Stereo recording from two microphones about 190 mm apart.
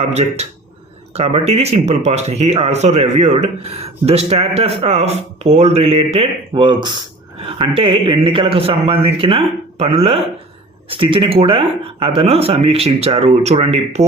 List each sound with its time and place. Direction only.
0.0 s a man's voice: 35° right (ahead or behind)